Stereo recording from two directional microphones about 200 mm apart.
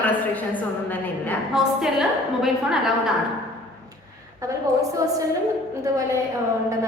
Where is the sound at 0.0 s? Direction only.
10° left (ahead or behind).